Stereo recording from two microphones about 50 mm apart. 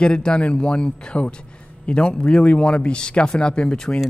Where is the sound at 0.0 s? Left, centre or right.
Centre.